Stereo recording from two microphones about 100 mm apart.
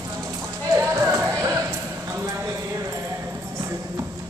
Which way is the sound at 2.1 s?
25° right (ahead or behind).